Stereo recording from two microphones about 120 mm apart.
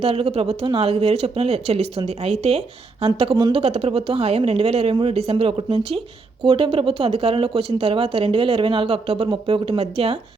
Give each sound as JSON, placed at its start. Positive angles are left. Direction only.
{"t": 0.0, "sound": "speech", "side_deg": -55}